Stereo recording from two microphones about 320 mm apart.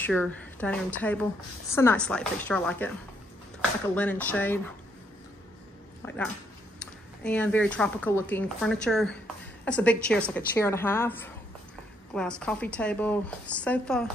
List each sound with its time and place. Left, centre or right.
0.0 s a woman's voice: centre
6.0 s a woman's voice: centre